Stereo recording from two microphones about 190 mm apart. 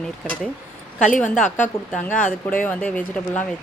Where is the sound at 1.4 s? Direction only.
40° left (ahead or behind).